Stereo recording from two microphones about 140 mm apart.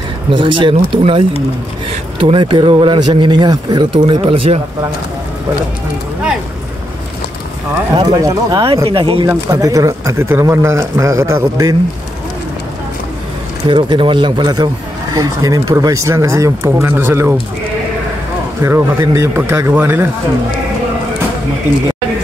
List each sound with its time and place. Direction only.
0.3 s speech: 35° right (ahead or behind)
7.9 s a man's voice: 25° right (ahead or behind)
8.8 s speech: 40° right (ahead or behind)
9.5 s a man's voice: 25° right (ahead or behind)
13.7 s a man's voice: 35° right (ahead or behind); by 17.4 s 15° right (ahead or behind)
18.6 s a man's voice: 20° right (ahead or behind)